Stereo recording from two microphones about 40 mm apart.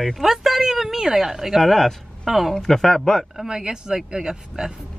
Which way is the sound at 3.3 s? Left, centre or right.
Centre.